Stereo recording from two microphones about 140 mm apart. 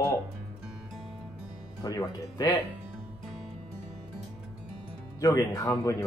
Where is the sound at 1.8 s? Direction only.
25° left (ahead or behind).